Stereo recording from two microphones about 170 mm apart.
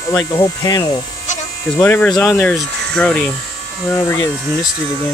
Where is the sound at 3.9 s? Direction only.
20° left (ahead or behind).